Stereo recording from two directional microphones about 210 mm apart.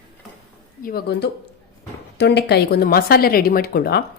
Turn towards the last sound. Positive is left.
turn(degrees=45)  # may be behind; listen again after turning